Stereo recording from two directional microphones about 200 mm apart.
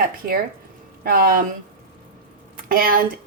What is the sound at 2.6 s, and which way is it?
Speech, 45° right (ahead or behind).